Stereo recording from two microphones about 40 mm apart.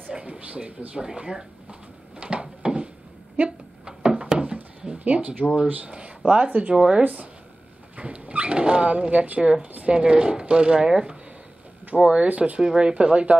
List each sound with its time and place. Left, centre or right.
0.1 s a sound: right
0.4 s speech: right
1.0 s a sound: centre
4.9 s speech: right
5.9 s speech: right
9.9 s speech: right
12.3 s speech: right
12.5 s speech: right